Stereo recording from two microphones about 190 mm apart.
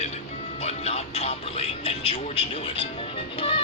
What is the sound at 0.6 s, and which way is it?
Music, 35° left (ahead or behind).